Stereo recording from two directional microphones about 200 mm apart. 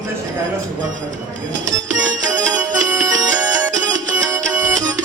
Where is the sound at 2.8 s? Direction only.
20° right (ahead or behind).